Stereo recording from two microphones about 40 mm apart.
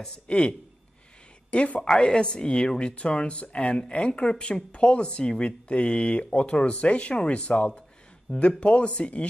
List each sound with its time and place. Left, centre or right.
0.0 s speech: left
1.8 s speech: left